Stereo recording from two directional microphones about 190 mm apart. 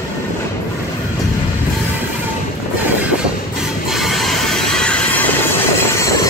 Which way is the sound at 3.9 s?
Centre (ahead or behind).